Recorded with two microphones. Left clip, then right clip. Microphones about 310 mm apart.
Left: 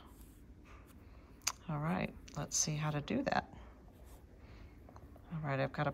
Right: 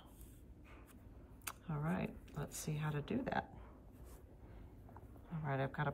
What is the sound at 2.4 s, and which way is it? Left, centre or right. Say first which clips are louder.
Speech: left 12 dB; left.